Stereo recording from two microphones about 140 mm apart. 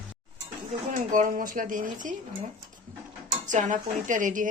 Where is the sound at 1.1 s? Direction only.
70° right (ahead or behind).